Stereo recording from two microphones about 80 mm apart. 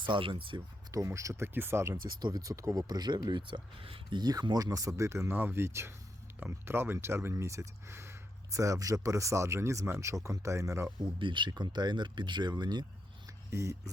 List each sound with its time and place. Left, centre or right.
0.0 s speech: right
0.9 s speech: right
2.2 s speech: right
2.8 s speech: right
4.5 s speech: right
11.2 s speech: right
13.2 s a sound: right